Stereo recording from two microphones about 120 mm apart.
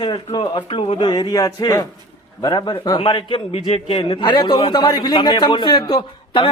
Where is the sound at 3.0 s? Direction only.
45° left (ahead or behind).